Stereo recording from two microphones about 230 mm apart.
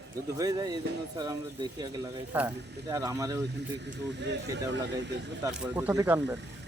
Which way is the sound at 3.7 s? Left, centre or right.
Right.